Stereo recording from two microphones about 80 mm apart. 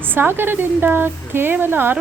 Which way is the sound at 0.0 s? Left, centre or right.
Right.